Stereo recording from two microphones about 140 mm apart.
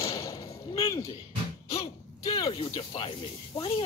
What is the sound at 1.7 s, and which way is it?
Speech, 40° left (ahead or behind).